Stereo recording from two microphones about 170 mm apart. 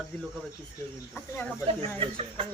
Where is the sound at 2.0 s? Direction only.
35° right (ahead or behind).